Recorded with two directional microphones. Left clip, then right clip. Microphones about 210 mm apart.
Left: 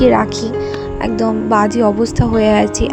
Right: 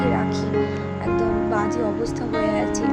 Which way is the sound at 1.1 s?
40° left (ahead or behind).